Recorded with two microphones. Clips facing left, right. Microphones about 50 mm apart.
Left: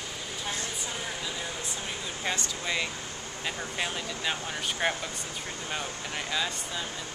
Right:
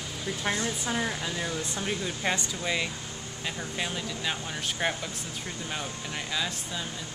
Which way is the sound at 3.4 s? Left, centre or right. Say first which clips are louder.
Left 1 dB; centre.